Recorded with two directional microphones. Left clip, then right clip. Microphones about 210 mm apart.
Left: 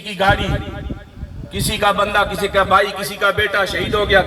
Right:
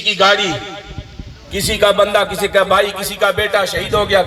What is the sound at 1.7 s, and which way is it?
A man's voice, 45° right (ahead or behind).